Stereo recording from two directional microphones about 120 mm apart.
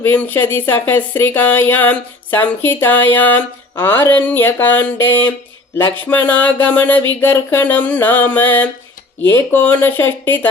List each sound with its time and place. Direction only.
0.0 s speech: 15° left (ahead or behind)